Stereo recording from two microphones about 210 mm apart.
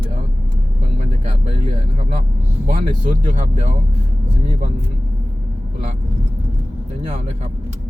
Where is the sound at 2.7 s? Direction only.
40° right (ahead or behind).